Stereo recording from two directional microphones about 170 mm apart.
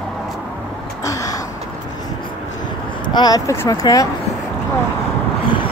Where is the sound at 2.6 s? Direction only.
25° left (ahead or behind).